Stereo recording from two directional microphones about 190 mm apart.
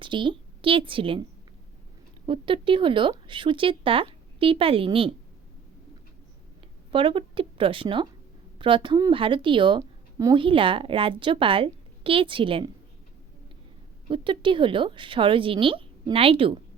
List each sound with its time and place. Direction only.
0.0 s a woman's voice: 25° right (ahead or behind)
2.2 s a woman's voice: 25° right (ahead or behind)
6.9 s a woman's voice: 25° right (ahead or behind)
14.1 s a woman's voice: 25° right (ahead or behind)